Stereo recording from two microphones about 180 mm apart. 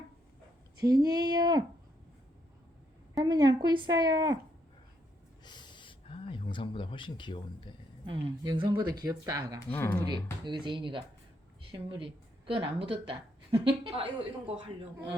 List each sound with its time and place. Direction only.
0.9 s a woman's voice: 20° right (ahead or behind)
3.2 s a woman's voice: 25° right (ahead or behind)
5.5 s a sound: 25° left (ahead or behind)
8.0 s a woman's voice: 30° right (ahead or behind)
9.6 s speech: 10° left (ahead or behind)
10.4 s a woman's voice: 25° right (ahead or behind)